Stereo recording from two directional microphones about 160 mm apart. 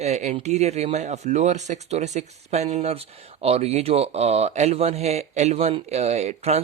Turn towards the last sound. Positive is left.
turn(degrees=-40)  # may be behind; listen again after turning